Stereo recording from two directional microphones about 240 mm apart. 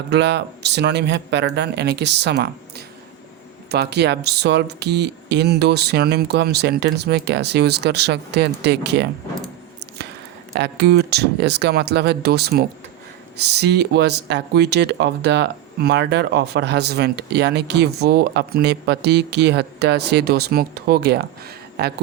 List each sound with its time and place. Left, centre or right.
0.1 s speech: right
10.5 s speech: right